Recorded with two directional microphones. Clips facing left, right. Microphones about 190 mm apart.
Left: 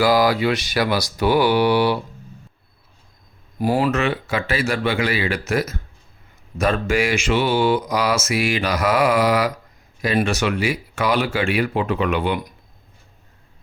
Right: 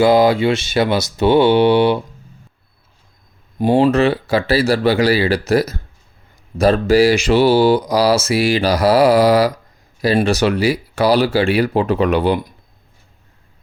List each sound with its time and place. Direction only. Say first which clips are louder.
0.0 s speech: right 5 dB; 25° right (ahead or behind)
3.6 s speech: right 6 dB; 25° right (ahead or behind)